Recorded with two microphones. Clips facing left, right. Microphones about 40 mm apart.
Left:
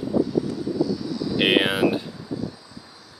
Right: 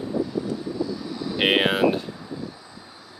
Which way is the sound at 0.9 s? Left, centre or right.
Right.